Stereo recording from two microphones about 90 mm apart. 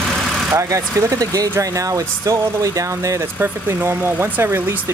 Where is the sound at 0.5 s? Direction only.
35° right (ahead or behind).